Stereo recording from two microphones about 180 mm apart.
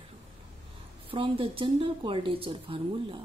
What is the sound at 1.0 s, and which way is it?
A woman's voice, 30° right (ahead or behind).